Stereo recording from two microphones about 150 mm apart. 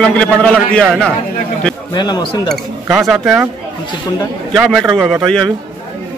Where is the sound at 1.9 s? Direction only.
30° left (ahead or behind).